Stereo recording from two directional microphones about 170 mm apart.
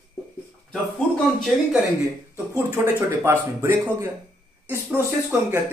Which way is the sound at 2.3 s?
15° right (ahead or behind).